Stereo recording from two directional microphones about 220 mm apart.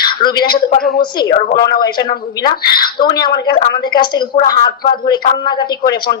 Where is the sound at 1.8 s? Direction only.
20° left (ahead or behind).